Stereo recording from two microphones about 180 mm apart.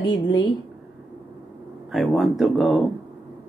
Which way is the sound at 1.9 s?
Centre (ahead or behind).